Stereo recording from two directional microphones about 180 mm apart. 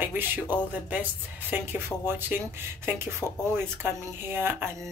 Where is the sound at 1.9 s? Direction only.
10° left (ahead or behind).